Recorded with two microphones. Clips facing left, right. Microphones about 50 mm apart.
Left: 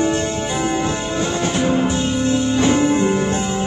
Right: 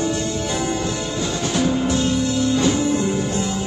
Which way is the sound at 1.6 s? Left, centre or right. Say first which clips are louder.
Even; left.